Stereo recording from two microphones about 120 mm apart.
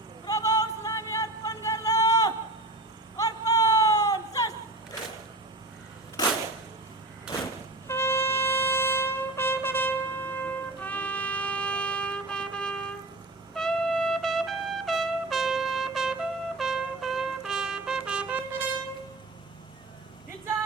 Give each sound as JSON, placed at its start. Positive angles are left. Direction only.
{"t": 0.3, "sound": "music", "side_deg": 30}
{"t": 3.2, "sound": "a sound", "side_deg": 30}
{"t": 7.9, "sound": "brass instrument", "side_deg": 20}
{"t": 13.5, "sound": "trumpet", "side_deg": 5}